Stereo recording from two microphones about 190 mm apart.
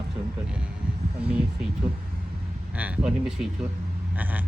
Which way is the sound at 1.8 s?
20° right (ahead or behind).